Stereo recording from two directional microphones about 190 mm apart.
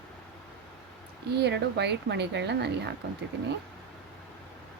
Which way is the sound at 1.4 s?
65° right (ahead or behind).